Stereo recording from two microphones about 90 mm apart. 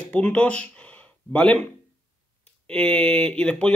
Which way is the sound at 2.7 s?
15° left (ahead or behind).